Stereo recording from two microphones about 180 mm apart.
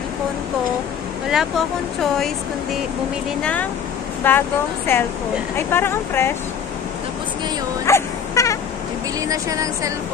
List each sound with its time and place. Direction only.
4.2 s speech: 10° left (ahead or behind)
7.8 s dog: 15° left (ahead or behind)
9.3 s speech: 20° right (ahead or behind)